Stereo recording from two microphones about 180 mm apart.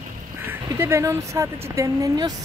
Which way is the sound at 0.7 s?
15° right (ahead or behind).